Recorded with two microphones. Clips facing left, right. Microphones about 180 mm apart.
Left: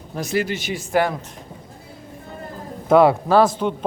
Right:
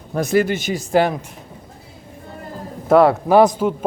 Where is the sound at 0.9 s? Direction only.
25° right (ahead or behind).